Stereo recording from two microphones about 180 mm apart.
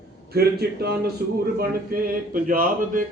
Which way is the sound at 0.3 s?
60° right (ahead or behind).